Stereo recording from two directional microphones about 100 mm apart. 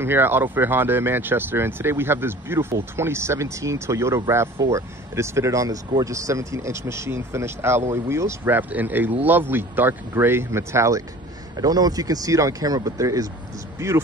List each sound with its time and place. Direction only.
0.0 s speech: 20° right (ahead or behind)
8.5 s speech: 15° right (ahead or behind)